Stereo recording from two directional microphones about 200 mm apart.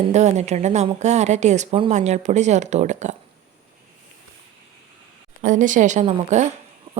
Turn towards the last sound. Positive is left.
turn(degrees=-35)  # may be behind; listen again after turning